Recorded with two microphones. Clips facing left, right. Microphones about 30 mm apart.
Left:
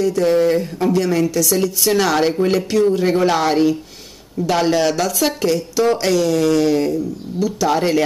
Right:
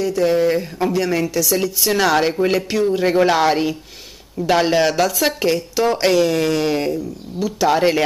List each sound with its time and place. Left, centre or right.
0.0 s a woman's voice: centre